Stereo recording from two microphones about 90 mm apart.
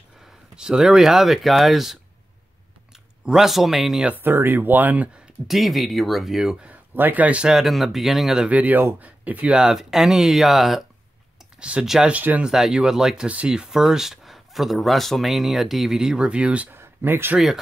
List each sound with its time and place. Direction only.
0.2 s speech: 5° right (ahead or behind)
3.3 s speech: 5° right (ahead or behind)
4.0 s speech: 20° right (ahead or behind)
5.5 s speech: centre (ahead or behind)
6.7 s speech: 20° right (ahead or behind); by 8.5 s 5° right (ahead or behind)
8.5 s speech: 15° right (ahead or behind)
9.6 s speech: 5° right (ahead or behind)
12.1 s speech: 15° right (ahead or behind)
12.4 s speech: 5° right (ahead or behind)
16.7 s speech: 25° right (ahead or behind)